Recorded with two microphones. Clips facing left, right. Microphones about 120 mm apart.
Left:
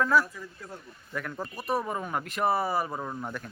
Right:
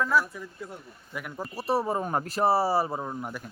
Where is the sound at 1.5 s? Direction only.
30° right (ahead or behind).